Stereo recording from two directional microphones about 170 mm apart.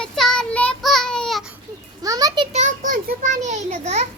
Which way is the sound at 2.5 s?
45° right (ahead or behind).